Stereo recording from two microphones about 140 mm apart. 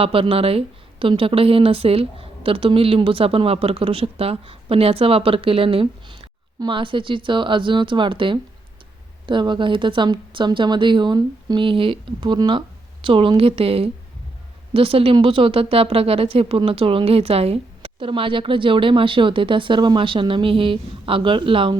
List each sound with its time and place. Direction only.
0.0 s a woman's voice: 40° right (ahead or behind)